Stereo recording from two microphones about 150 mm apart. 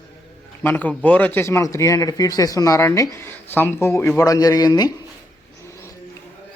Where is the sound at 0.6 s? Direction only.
10° left (ahead or behind).